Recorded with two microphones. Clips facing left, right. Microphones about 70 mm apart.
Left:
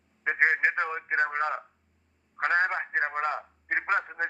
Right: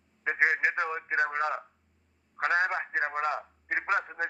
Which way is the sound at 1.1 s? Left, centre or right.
Left.